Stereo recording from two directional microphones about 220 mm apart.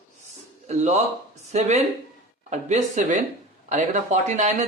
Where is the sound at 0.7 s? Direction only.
30° right (ahead or behind).